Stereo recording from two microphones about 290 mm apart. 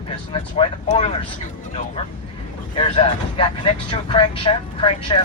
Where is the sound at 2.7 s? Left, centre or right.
Centre.